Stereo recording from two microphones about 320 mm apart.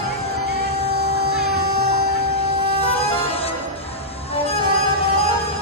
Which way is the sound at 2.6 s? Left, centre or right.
Centre.